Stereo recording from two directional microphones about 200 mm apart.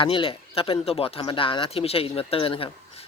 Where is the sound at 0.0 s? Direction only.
25° left (ahead or behind).